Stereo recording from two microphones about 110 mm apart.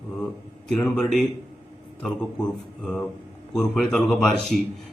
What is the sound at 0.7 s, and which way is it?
Speech, 5° left (ahead or behind).